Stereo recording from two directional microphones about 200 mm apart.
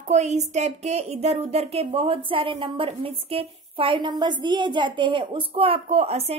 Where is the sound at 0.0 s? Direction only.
35° right (ahead or behind).